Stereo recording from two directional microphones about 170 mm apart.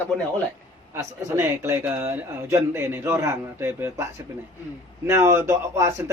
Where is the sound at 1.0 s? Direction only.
15° right (ahead or behind).